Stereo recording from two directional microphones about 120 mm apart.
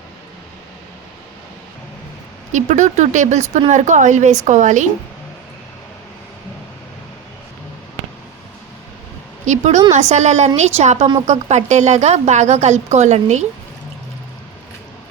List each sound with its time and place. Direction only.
2.5 s speech: 90° right
3.7 s speech: 90° right
9.5 s a woman's voice: 75° right (ahead or behind)